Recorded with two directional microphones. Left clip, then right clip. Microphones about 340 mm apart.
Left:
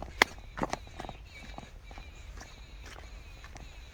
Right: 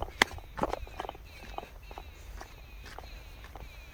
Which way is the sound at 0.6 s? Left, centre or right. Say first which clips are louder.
Right 2 dB; centre.